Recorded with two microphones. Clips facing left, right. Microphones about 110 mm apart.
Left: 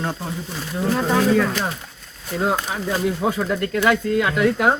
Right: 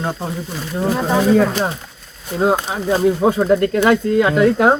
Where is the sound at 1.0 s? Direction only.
20° right (ahead or behind).